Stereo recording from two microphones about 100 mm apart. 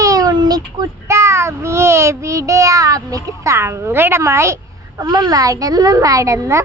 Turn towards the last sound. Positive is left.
turn(degrees=-30)  # may be behind; listen again after turning